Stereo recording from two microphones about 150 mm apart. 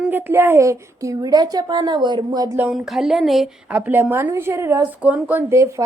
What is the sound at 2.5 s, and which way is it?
Speech, 5° right (ahead or behind).